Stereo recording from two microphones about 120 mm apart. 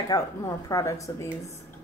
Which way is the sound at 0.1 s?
30° left (ahead or behind).